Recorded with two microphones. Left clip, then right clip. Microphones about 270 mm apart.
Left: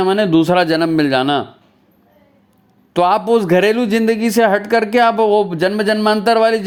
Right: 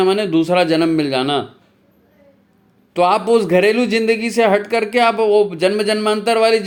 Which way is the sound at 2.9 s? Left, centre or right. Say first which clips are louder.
Left 1 dB; left.